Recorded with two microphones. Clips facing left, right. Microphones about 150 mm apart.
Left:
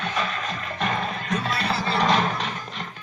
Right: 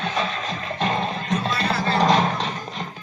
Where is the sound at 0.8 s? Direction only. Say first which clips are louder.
Right 3 dB; 30° right (ahead or behind).